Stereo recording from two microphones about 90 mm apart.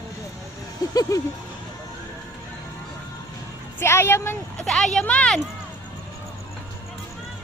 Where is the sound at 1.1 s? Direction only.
40° left (ahead or behind).